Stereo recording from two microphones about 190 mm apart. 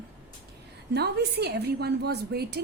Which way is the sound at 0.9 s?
60° right (ahead or behind).